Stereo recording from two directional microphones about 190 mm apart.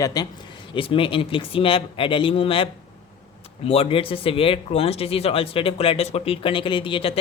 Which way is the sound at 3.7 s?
30° left (ahead or behind).